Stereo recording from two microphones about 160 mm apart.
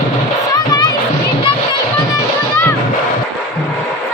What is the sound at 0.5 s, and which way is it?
Music, 25° left (ahead or behind).